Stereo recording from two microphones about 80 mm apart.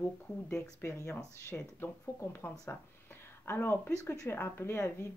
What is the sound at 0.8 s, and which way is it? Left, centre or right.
Speech, left.